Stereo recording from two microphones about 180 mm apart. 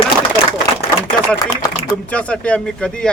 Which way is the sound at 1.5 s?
25° left (ahead or behind).